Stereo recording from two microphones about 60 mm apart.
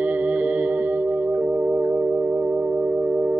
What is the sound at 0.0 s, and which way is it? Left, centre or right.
Singing bowl, right.